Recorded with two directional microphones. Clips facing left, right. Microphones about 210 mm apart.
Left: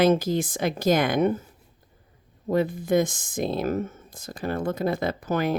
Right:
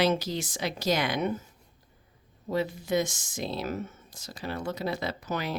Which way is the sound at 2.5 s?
50° left (ahead or behind).